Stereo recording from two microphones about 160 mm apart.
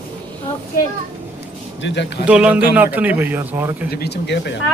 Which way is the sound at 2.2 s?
5° right (ahead or behind).